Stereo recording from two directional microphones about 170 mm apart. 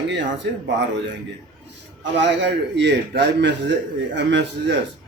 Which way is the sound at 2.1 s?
90° right.